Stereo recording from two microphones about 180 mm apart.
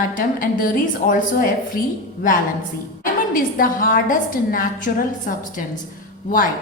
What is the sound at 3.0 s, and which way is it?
A woman's voice, 50° left (ahead or behind).